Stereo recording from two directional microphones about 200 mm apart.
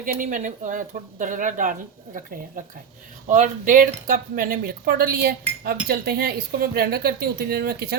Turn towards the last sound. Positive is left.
turn(degrees=-50)  # may be behind; listen again after turning